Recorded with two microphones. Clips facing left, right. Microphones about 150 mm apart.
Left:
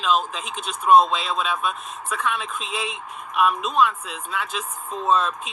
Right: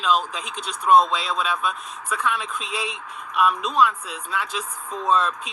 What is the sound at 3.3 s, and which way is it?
Speech, 15° left (ahead or behind).